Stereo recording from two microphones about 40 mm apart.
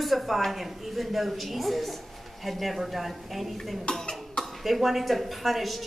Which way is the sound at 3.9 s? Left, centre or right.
Left.